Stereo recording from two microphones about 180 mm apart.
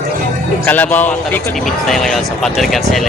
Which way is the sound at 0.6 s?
10° left (ahead or behind).